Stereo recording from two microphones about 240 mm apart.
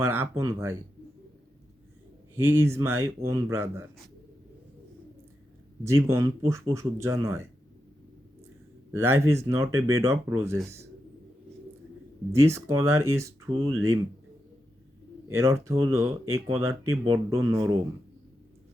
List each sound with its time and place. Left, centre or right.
0.0 s speech: centre
2.3 s speech: centre
5.8 s speech: centre
8.9 s speech: centre
12.3 s speech: centre
15.3 s speech: centre